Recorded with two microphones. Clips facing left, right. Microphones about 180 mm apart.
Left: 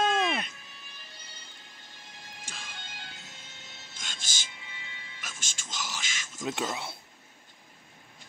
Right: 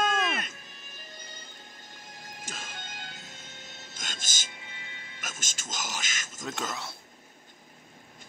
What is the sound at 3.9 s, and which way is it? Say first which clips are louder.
Music: right 2 dB; 45° right (ahead or behind).